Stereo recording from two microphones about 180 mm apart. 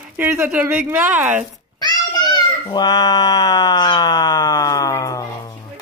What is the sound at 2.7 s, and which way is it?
Siren, 25° left (ahead or behind).